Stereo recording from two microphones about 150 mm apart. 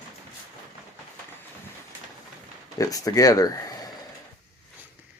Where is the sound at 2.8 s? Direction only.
25° left (ahead or behind).